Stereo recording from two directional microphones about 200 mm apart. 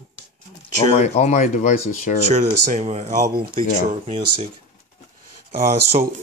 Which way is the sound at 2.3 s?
35° right (ahead or behind).